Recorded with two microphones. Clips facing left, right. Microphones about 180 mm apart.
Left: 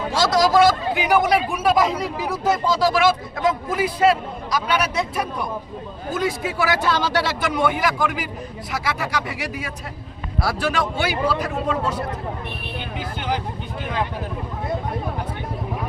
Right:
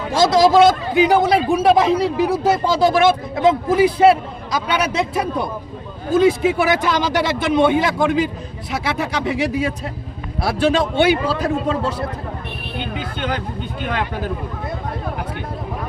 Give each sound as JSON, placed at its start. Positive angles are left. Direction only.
{"t": 0.1, "sound": "a man's voice", "side_deg": -20}
{"t": 13.0, "sound": "music", "side_deg": -70}
{"t": 13.8, "sound": "speech", "side_deg": -75}